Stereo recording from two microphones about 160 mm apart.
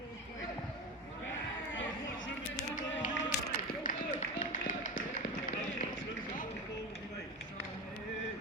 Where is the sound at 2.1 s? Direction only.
55° left (ahead or behind).